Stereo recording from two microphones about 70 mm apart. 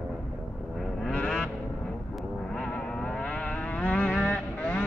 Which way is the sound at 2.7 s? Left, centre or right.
Centre.